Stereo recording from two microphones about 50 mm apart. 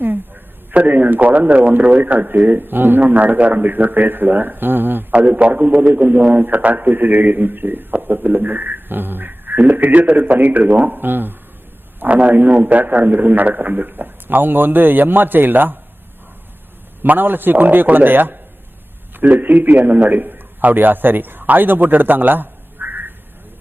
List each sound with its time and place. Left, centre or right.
0.7 s a man's voice: right
5.1 s a man's voice: right
12.0 s a man's voice: right
17.0 s a man's voice: right